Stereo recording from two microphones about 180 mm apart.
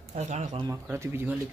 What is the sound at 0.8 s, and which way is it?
Speech, 15° right (ahead or behind).